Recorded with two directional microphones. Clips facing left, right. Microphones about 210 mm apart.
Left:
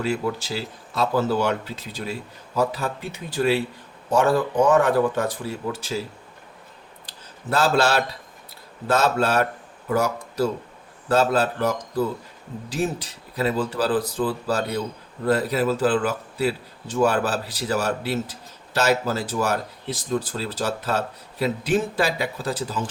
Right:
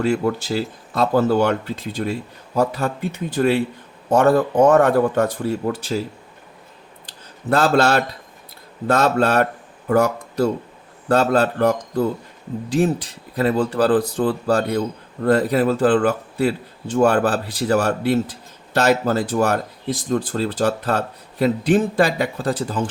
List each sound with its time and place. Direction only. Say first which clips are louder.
0.0 s a man's voice: right 5 dB; 55° right (ahead or behind)
7.5 s a man's voice: right 4 dB; 55° right (ahead or behind)
13.3 s a man's voice: right 5 dB; 55° right (ahead or behind)